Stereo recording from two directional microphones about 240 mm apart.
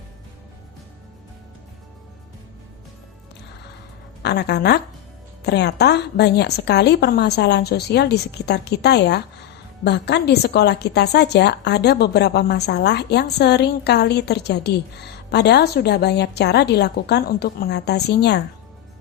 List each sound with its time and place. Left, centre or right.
4.2 s a woman's voice: left